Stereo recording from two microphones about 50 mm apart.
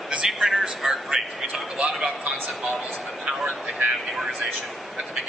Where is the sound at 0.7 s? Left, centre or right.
Centre.